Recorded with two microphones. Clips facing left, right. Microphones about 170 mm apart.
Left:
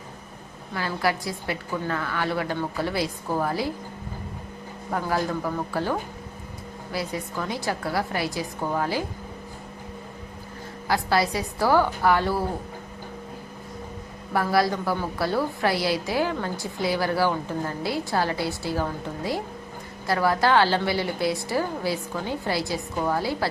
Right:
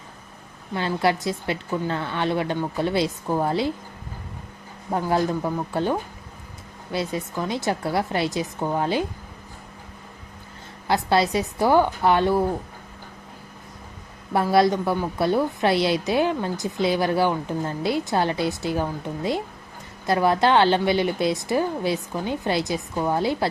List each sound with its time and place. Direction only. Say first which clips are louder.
0.7 s a woman's voice: right 4 dB; 25° right (ahead or behind)
4.9 s a woman's voice: right 4 dB; 25° right (ahead or behind)
10.8 s a woman's voice: right 3 dB; 25° right (ahead or behind)
14.3 s a woman's voice: right 4 dB; 25° right (ahead or behind)